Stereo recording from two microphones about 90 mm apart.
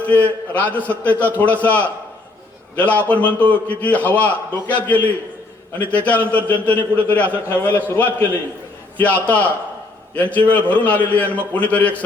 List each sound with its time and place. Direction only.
0.0 s a man's voice: 15° left (ahead or behind)